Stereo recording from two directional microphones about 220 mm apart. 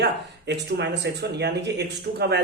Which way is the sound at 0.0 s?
50° right (ahead or behind).